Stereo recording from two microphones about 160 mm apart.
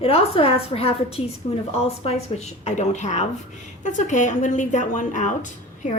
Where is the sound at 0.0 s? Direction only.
35° left (ahead or behind).